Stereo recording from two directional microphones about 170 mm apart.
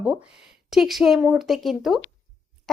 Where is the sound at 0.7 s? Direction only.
Centre (ahead or behind).